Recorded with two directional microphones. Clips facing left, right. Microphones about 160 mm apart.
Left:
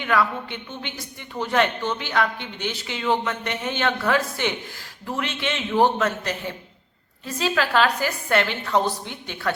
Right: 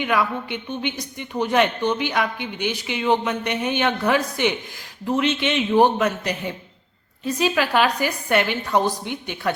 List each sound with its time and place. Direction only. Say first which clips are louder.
0.0 s a woman's voice: right 1 dB; 15° right (ahead or behind)